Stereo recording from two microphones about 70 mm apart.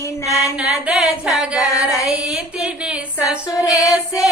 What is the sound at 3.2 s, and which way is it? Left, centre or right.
Female singing, left.